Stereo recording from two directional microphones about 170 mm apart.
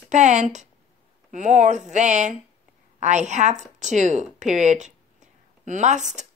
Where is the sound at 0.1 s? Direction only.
45° right (ahead or behind).